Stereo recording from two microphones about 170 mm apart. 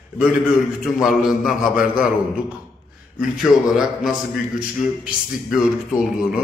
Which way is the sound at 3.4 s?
Centre (ahead or behind).